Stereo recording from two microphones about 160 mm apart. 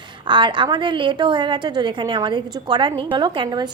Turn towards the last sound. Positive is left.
turn(degrees=-30)  # may be behind; listen again after turning